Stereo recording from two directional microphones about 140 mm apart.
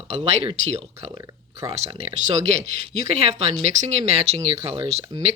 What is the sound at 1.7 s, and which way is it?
Speech, 45° right (ahead or behind).